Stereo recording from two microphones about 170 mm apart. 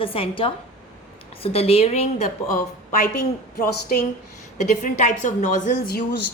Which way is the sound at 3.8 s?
60° left (ahead or behind).